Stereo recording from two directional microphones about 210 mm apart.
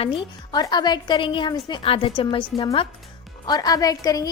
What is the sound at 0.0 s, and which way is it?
A woman's voice, 25° left (ahead or behind).